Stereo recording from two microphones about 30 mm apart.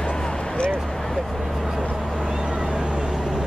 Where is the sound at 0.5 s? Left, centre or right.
Left.